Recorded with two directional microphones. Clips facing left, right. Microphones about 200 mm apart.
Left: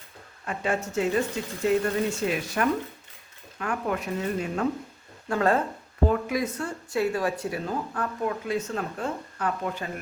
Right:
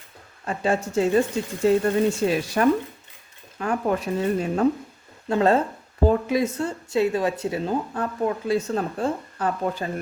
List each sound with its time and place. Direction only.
0.4 s speech: 30° right (ahead or behind)